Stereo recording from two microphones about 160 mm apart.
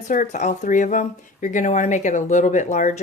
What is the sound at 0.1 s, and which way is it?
A woman's voice, 50° left (ahead or behind).